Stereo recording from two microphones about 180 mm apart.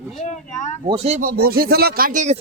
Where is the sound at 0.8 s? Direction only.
35° right (ahead or behind).